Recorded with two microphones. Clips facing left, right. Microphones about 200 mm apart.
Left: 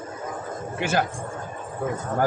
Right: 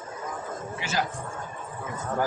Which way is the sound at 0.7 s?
55° left (ahead or behind).